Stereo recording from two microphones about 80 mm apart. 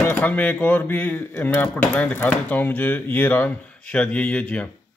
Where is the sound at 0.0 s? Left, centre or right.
Left.